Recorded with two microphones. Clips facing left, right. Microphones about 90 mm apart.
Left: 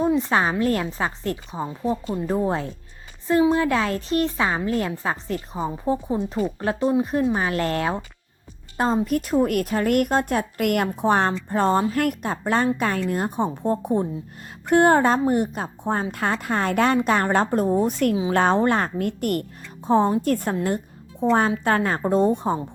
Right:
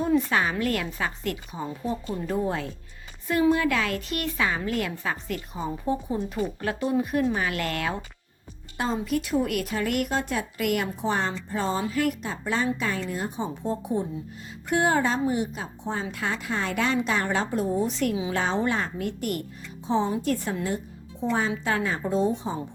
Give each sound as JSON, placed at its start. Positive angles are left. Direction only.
{"t": 0.2, "sound": "a woman's voice", "side_deg": 30}
{"t": 8.8, "sound": "a woman's voice", "side_deg": 40}